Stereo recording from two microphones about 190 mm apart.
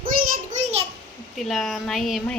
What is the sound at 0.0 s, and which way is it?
Child singing, 50° right (ahead or behind).